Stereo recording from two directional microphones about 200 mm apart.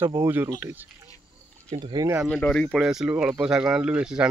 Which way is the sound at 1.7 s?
20° right (ahead or behind).